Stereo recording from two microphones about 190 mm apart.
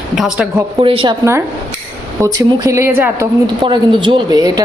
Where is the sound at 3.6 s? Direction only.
25° right (ahead or behind).